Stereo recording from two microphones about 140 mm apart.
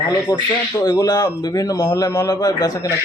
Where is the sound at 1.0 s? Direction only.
25° left (ahead or behind).